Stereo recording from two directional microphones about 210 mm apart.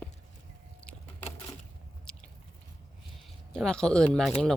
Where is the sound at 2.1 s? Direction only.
5° left (ahead or behind).